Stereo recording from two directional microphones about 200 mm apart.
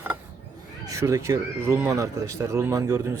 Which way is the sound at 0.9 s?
15° right (ahead or behind).